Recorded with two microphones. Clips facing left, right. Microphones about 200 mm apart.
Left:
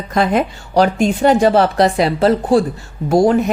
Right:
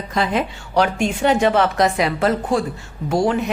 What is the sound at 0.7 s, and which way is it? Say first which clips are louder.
A woman's voice: left 5 dB; 35° left (ahead or behind).